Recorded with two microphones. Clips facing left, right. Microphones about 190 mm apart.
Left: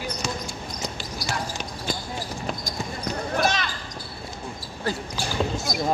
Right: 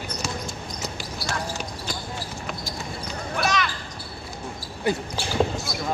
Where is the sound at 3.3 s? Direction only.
35° left (ahead or behind).